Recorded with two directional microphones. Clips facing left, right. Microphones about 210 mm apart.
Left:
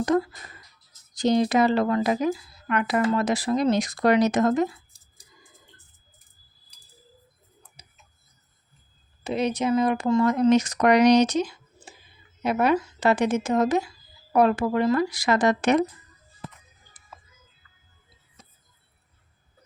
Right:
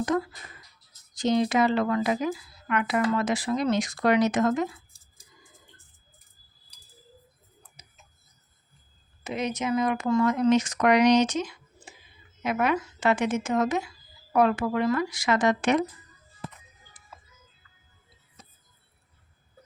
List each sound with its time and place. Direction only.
1.1 s speech: 35° left (ahead or behind)
7.8 s tick: 30° left (ahead or behind)
9.2 s speech: 30° left (ahead or behind)